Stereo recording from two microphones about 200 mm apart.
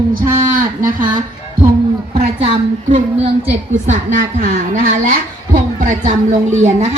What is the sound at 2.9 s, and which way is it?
Speech, 30° right (ahead or behind).